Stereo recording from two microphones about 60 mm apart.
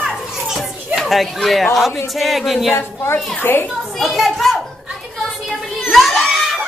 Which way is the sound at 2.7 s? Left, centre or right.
Left.